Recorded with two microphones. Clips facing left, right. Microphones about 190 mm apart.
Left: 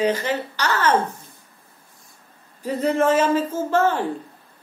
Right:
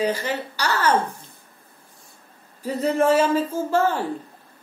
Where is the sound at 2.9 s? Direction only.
10° right (ahead or behind).